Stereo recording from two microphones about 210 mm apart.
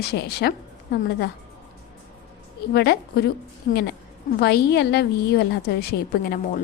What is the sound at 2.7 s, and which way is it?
A woman's voice, 50° left (ahead or behind).